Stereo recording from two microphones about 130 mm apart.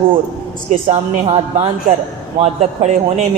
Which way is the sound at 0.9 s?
55° right (ahead or behind).